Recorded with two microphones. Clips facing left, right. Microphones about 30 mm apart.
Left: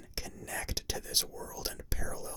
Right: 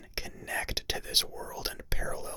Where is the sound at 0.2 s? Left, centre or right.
Right.